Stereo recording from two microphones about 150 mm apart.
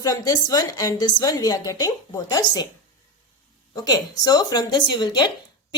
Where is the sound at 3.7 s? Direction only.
25° left (ahead or behind).